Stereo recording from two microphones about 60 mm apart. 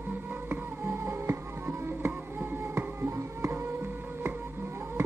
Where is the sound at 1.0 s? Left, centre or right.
Right.